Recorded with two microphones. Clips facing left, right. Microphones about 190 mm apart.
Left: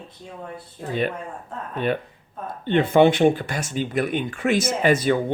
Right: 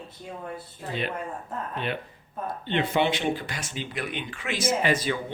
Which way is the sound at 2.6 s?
50° left (ahead or behind).